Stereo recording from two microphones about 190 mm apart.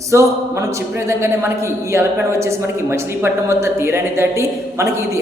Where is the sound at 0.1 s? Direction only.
15° right (ahead or behind).